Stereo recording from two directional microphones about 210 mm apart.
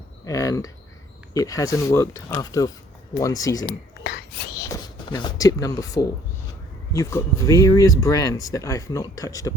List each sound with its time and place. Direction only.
0.3 s speech: 15° left (ahead or behind)
4.7 s speech: 20° left (ahead or behind)